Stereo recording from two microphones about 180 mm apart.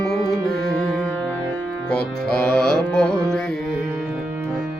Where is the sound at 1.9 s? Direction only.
5° left (ahead or behind).